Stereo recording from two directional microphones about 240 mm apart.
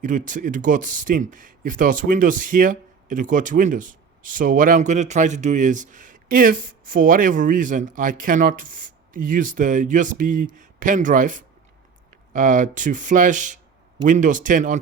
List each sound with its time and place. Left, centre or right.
0.0 s speech: right